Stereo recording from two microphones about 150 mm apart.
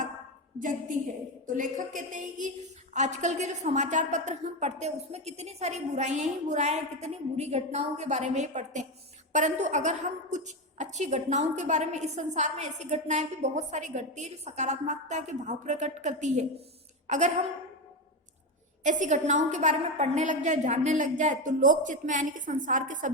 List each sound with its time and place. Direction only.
1.5 s a woman's voice: 60° right (ahead or behind)
18.8 s a woman's voice: 55° right (ahead or behind)